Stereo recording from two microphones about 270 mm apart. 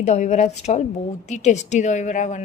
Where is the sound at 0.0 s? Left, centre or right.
Left.